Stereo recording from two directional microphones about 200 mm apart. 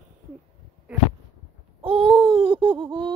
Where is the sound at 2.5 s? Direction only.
25° right (ahead or behind).